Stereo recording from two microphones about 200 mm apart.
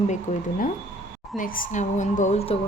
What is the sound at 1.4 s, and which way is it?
Speech, 45° left (ahead or behind).